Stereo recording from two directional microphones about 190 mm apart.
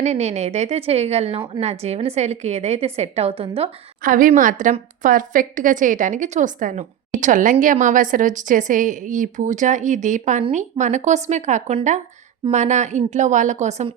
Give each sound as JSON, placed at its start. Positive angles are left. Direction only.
{"t": 0.0, "sound": "a woman's voice", "side_deg": -35}
{"t": 4.0, "sound": "a woman's voice", "side_deg": -45}